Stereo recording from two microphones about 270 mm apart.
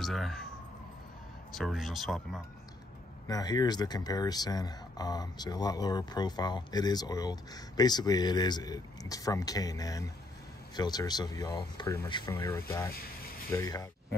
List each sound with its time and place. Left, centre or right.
0.0 s speech: centre
1.5 s speech: centre
3.3 s speech: centre